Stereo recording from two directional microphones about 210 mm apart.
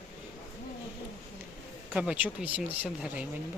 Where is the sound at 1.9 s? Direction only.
5° right (ahead or behind).